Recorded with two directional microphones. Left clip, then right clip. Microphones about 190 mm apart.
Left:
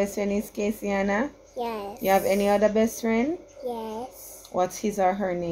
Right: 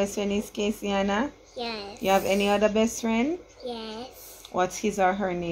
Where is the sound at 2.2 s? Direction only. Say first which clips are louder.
Left 2 dB; 20° right (ahead or behind).